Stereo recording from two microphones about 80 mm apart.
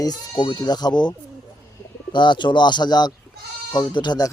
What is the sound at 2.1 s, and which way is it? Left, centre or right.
Speech, left.